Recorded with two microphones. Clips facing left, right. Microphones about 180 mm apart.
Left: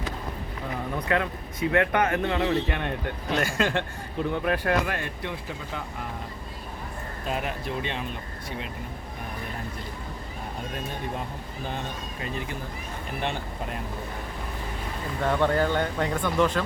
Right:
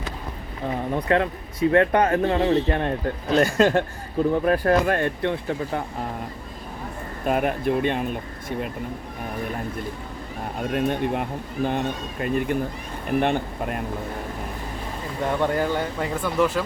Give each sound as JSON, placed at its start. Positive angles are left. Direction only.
{"t": 0.9, "sound": "a man's voice", "side_deg": -30}
{"t": 4.9, "sound": "speech", "side_deg": -55}
{"t": 7.3, "sound": "speech", "side_deg": -55}
{"t": 10.7, "sound": "speech", "side_deg": -65}
{"t": 15.2, "sound": "speech", "side_deg": -15}